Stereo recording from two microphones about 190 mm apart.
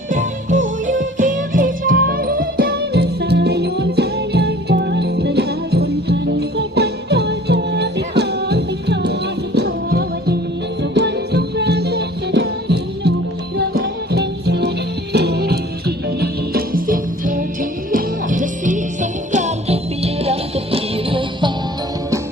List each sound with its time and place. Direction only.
0.1 s music: 40° right (ahead or behind)